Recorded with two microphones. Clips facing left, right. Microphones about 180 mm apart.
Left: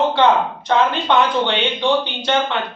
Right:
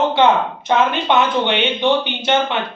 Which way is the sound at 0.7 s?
20° right (ahead or behind).